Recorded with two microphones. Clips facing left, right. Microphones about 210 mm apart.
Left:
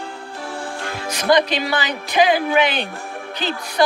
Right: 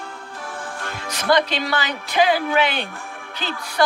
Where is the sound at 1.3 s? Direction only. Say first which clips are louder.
Left 2 dB; 15° left (ahead or behind).